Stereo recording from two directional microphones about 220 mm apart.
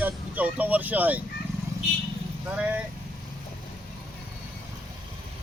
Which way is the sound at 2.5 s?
5° right (ahead or behind).